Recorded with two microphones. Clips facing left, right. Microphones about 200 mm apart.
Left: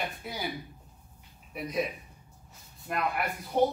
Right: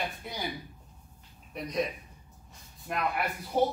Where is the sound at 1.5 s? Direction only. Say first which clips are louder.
Even; 5° left (ahead or behind).